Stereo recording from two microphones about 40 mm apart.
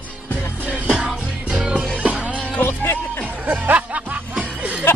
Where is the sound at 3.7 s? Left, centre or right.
Right.